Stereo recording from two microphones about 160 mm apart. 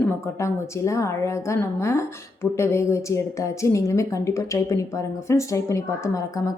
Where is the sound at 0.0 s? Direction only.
20° left (ahead or behind).